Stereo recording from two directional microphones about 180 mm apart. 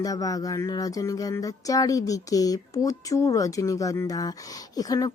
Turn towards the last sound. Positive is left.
turn(degrees=20)  # may be behind; listen again after turning